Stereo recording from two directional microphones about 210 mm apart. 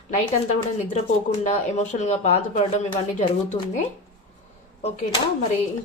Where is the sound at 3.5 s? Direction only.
25° left (ahead or behind).